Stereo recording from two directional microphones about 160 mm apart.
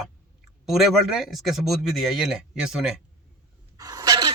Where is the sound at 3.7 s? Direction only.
25° right (ahead or behind).